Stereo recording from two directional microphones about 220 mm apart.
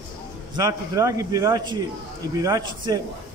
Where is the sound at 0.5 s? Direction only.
15° right (ahead or behind).